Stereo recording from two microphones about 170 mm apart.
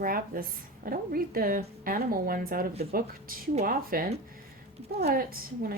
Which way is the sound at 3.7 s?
60° right (ahead or behind).